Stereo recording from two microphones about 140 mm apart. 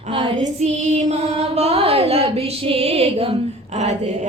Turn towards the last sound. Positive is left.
turn(degrees=-55)  # may be behind; listen again after turning